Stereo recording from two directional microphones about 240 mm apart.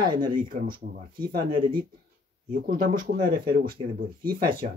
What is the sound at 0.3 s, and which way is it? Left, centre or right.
Speech, right.